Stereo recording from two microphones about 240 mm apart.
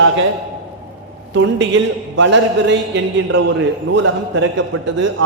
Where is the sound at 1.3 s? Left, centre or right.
Right.